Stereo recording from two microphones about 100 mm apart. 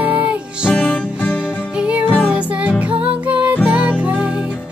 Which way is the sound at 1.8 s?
10° right (ahead or behind).